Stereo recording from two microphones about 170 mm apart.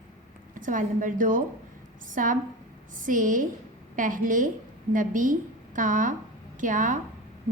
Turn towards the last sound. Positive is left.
turn(degrees=-50)  # may be behind; listen again after turning